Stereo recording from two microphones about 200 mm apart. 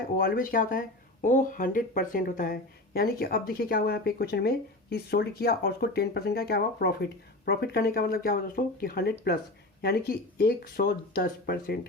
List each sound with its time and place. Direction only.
0.2 s speech: 45° left (ahead or behind)